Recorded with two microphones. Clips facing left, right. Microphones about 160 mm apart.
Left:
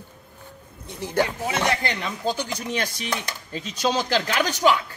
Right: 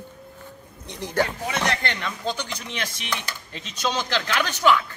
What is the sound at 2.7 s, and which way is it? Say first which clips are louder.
Speech: left 3 dB; 40° left (ahead or behind).